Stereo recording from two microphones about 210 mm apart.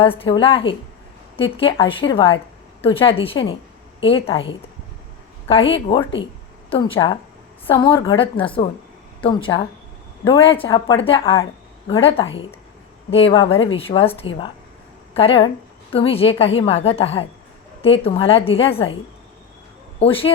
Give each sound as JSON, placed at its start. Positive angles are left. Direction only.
{"t": 0.0, "sound": "a woman's voice", "side_deg": 25}
{"t": 20.0, "sound": "a woman's voice", "side_deg": 25}